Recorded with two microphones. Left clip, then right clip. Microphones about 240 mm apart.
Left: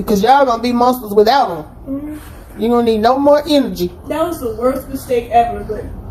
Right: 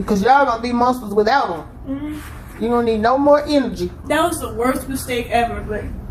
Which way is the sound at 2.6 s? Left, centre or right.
Left.